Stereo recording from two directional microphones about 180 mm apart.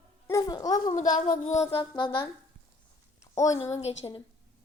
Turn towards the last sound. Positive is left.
turn(degrees=20)  # may be behind; listen again after turning